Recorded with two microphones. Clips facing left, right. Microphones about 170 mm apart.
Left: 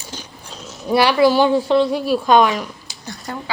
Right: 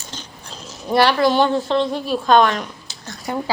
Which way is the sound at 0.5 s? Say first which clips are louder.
Left 1 dB; centre (ahead or behind).